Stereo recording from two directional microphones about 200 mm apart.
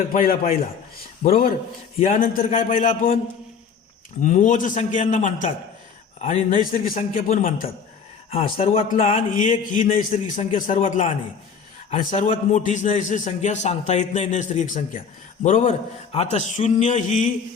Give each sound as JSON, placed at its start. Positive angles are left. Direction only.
{"t": 0.1, "sound": "a man's voice", "side_deg": 45}
{"t": 4.2, "sound": "a man's voice", "side_deg": 40}
{"t": 8.5, "sound": "a man's voice", "side_deg": 30}